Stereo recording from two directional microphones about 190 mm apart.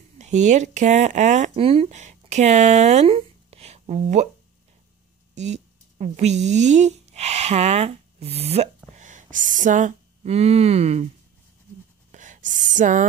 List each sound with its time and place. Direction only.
0.2 s speech: 40° right (ahead or behind)
5.3 s speech: 35° right (ahead or behind)
12.1 s whispering: 40° right (ahead or behind)